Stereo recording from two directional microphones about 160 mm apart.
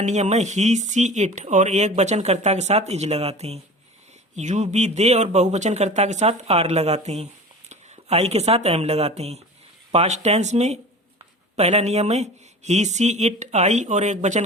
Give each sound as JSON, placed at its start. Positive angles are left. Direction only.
{"t": 0.0, "sound": "speech", "side_deg": -45}